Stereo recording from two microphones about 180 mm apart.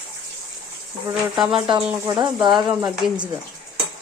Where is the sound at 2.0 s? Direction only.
25° right (ahead or behind).